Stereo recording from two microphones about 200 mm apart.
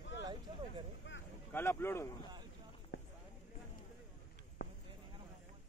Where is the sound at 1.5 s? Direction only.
10° left (ahead or behind).